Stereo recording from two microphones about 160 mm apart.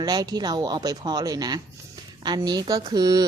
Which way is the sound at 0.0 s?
25° right (ahead or behind).